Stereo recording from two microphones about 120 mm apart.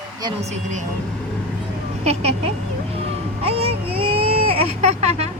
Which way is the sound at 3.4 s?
55° right (ahead or behind).